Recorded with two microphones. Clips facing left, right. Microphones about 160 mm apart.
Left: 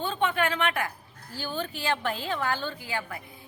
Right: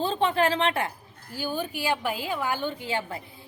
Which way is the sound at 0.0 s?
30° right (ahead or behind).